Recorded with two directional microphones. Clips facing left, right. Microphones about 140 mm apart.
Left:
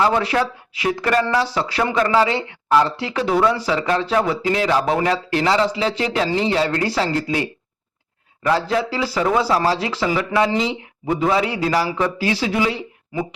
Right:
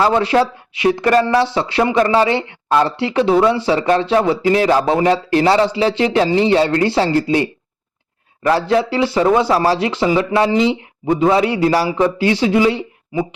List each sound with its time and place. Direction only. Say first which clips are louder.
0.0 s speech: right 4 dB; 25° right (ahead or behind)
8.4 s speech: right 4 dB; 25° right (ahead or behind)